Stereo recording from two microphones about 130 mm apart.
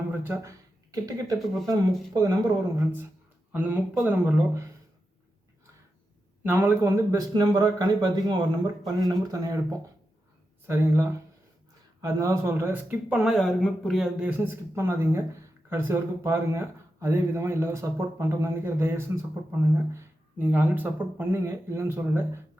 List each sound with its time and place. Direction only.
0.1 s speech: 15° right (ahead or behind)
0.9 s speech: 30° right (ahead or behind)
1.4 s speech: centre (ahead or behind)
2.1 s speech: 30° right (ahead or behind)
2.8 s speech: 15° right (ahead or behind)
6.4 s speech: 15° right (ahead or behind)